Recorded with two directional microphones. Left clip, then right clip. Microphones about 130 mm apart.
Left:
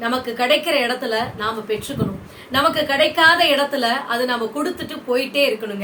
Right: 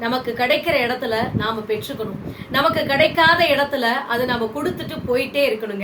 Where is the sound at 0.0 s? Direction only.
10° left (ahead or behind).